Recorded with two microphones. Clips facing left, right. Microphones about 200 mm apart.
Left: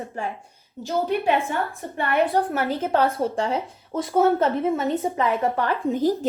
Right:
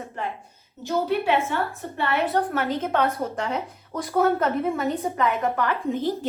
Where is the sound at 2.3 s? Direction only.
30° left (ahead or behind).